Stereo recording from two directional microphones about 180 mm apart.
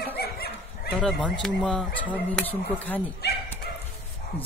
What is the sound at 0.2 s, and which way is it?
Dog, 60° left (ahead or behind).